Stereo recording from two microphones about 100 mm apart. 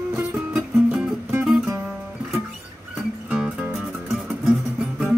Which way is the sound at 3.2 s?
10° right (ahead or behind).